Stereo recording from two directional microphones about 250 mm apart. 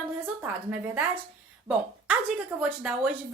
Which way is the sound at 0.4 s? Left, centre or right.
Centre.